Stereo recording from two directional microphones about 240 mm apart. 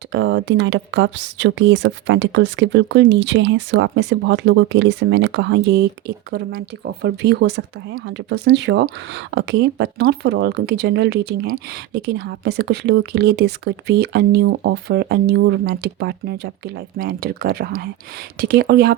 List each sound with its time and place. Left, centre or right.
0.1 s speech: right